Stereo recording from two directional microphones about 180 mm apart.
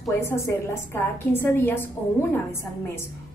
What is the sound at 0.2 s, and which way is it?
A woman's voice, 15° left (ahead or behind).